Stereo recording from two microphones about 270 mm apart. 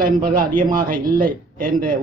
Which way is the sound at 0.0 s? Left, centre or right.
Right.